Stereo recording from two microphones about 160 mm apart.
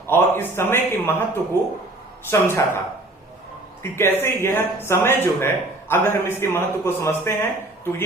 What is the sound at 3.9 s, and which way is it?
A man's voice, 15° left (ahead or behind).